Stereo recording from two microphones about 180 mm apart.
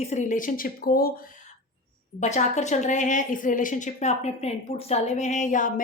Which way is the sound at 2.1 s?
40° left (ahead or behind).